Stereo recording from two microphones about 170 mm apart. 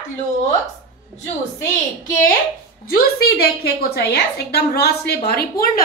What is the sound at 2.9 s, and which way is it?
A woman's voice, 65° left (ahead or behind).